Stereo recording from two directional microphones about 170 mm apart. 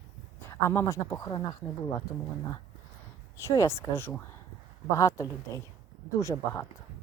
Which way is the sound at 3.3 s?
20° left (ahead or behind).